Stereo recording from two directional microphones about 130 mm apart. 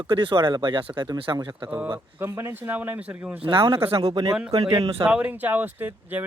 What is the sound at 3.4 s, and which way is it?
Speech, 35° right (ahead or behind).